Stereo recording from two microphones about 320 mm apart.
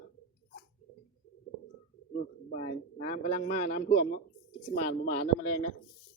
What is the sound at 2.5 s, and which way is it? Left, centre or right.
A man's voice, left.